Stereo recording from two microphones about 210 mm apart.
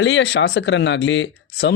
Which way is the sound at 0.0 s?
55° left (ahead or behind).